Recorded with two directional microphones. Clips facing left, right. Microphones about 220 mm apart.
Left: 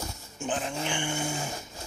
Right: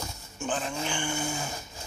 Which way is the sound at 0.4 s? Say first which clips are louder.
Even; 15° left (ahead or behind).